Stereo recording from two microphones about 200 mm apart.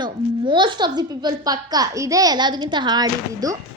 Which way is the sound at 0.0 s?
25° right (ahead or behind).